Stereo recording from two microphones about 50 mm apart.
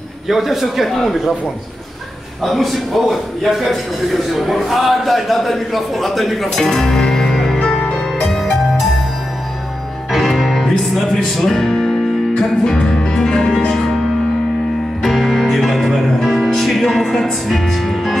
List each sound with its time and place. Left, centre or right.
0.3 s a man's voice: centre
2.4 s a man's voice: centre
6.5 s music: centre
10.1 s music: centre
15.0 s music: centre